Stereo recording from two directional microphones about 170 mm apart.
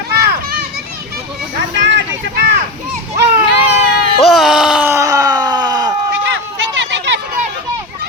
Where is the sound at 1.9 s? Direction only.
90° right.